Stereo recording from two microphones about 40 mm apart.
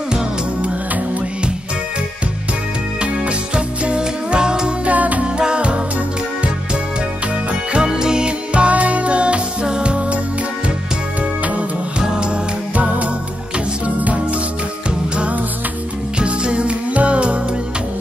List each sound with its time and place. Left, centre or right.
3.0 s music: right
4.8 s music: right
5.2 s music: right
7.7 s music: right
12.0 s music: right
12.7 s music: right